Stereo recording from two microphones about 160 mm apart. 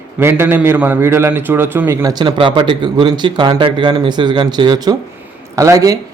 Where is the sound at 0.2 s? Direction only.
15° right (ahead or behind).